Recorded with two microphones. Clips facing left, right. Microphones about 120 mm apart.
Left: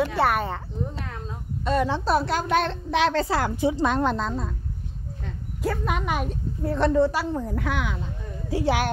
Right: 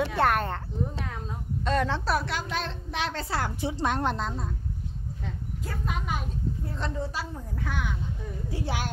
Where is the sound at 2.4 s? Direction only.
60° left (ahead or behind); by 3.3 s 90° left.